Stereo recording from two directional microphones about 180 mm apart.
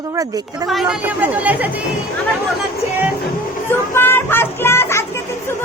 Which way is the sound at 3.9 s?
10° left (ahead or behind).